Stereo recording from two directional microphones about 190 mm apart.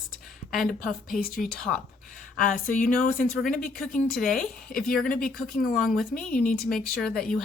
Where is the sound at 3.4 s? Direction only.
5° left (ahead or behind).